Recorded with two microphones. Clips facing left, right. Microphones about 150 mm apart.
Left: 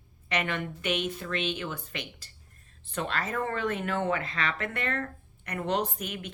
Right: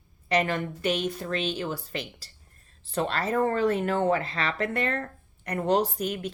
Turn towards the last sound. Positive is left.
turn(degrees=-35)  # may be behind; listen again after turning